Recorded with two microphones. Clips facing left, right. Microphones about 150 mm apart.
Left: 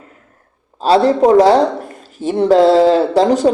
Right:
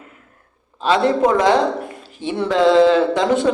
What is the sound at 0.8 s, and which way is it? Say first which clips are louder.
Speech: left 4 dB; 35° left (ahead or behind).